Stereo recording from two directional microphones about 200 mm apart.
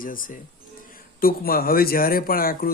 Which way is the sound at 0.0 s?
45° left (ahead or behind).